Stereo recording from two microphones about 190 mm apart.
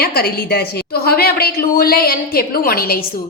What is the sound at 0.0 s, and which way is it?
A woman's voice, 55° left (ahead or behind).